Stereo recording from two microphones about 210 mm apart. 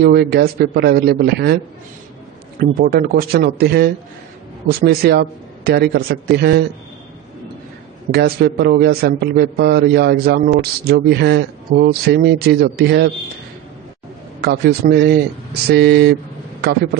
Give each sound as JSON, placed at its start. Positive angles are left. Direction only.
{"t": 0.0, "sound": "a man's voice", "side_deg": -50}
{"t": 2.6, "sound": "a man's voice", "side_deg": -45}
{"t": 8.1, "sound": "a man's voice", "side_deg": -50}
{"t": 14.4, "sound": "a man's voice", "side_deg": -50}